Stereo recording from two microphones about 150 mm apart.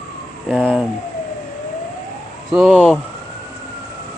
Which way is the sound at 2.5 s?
5° right (ahead or behind).